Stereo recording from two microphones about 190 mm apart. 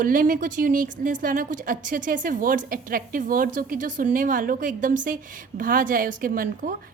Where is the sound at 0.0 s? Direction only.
45° right (ahead or behind).